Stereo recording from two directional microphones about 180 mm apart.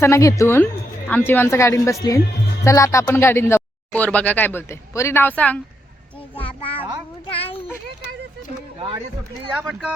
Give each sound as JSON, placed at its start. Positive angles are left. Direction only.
{"t": 0.0, "sound": "speech", "side_deg": 15}
{"t": 6.4, "sound": "a child's voice", "side_deg": 30}
{"t": 9.6, "sound": "speech", "side_deg": -5}